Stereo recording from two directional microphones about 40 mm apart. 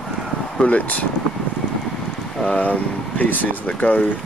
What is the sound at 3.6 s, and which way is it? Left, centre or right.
Speech, left.